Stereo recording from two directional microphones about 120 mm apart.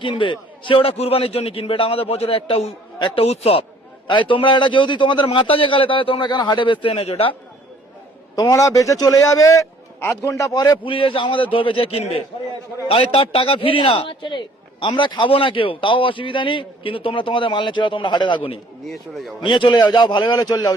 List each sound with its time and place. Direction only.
0.0 s a man's voice: 45° left (ahead or behind)
8.4 s a man's voice: 30° left (ahead or behind); by 18.6 s 45° left (ahead or behind)
18.9 s a man's voice: centre (ahead or behind)
19.4 s a man's voice: 45° left (ahead or behind)